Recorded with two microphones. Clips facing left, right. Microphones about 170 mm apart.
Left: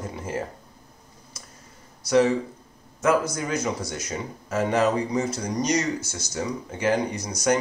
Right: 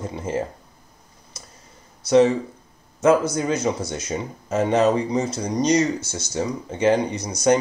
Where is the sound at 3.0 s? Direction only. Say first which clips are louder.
Right 5 dB; 25° right (ahead or behind).